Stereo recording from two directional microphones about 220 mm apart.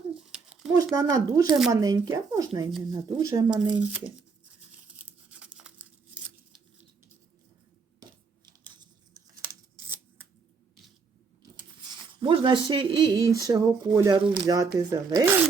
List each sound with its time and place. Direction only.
0.1 s a sound: 5° right (ahead or behind)
0.9 s speech: 15° right (ahead or behind)
5.0 s tearing: 5° right (ahead or behind)
8.4 s tearing: 20° right (ahead or behind)
11.9 s speech: 25° right (ahead or behind)